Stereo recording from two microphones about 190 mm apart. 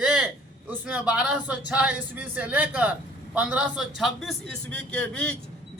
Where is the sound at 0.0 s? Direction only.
5° right (ahead or behind).